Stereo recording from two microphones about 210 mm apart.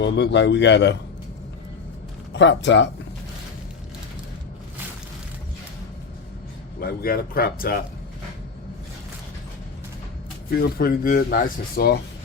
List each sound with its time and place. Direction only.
0.0 s speech: 55° left (ahead or behind)
2.3 s speech: 55° left (ahead or behind)
6.7 s speech: 45° left (ahead or behind)
10.5 s speech: 45° left (ahead or behind)